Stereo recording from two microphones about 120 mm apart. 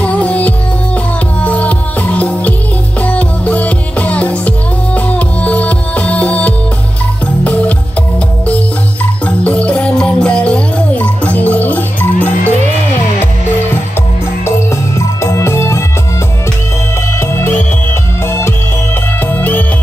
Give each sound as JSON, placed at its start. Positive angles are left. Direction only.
{"t": 0.0, "sound": "music", "side_deg": 10}
{"t": 9.2, "sound": "music", "side_deg": 10}
{"t": 15.0, "sound": "music", "side_deg": 25}
{"t": 17.2, "sound": "music", "side_deg": 20}
{"t": 19.3, "sound": "music", "side_deg": 15}